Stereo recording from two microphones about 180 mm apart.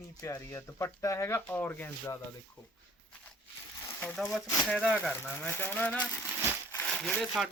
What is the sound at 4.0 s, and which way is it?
Speech, 5° left (ahead or behind).